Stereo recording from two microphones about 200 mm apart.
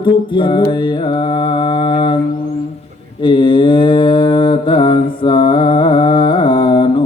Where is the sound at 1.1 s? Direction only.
25° left (ahead or behind).